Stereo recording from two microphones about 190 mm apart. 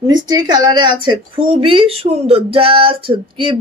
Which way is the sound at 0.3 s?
20° right (ahead or behind).